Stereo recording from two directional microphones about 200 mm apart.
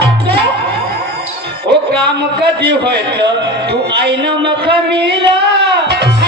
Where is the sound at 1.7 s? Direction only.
55° right (ahead or behind).